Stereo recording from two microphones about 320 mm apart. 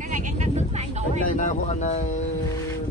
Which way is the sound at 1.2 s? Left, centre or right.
Left.